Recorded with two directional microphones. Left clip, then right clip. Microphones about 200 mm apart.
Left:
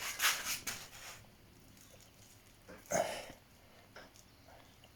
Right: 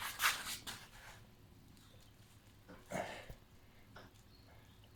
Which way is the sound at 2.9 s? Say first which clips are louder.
Left 8 dB; 25° left (ahead or behind).